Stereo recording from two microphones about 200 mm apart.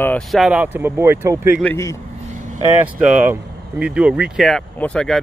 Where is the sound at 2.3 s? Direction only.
40° right (ahead or behind).